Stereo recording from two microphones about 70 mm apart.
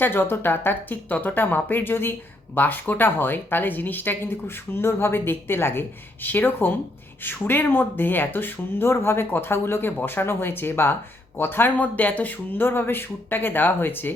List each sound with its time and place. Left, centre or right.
0.0 s speech: left